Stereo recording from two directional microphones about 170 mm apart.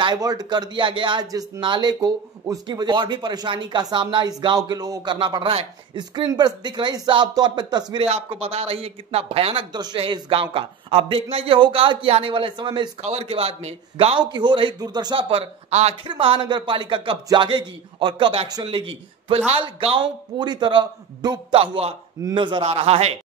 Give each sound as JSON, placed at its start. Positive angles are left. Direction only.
{"t": 0.0, "sound": "a man's voice", "side_deg": -25}